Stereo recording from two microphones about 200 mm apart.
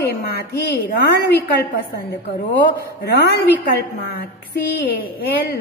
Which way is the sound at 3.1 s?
55° left (ahead or behind).